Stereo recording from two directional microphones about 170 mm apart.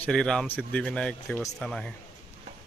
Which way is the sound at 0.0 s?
5° left (ahead or behind).